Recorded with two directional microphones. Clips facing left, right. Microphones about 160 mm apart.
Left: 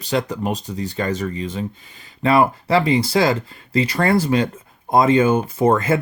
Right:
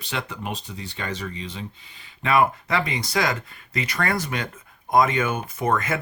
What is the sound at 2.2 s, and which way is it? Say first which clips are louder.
Speech: left 4 dB; 35° left (ahead or behind).